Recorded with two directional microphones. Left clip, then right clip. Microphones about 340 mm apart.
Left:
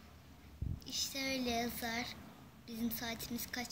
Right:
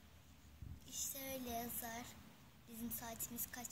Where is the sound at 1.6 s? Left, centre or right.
Right.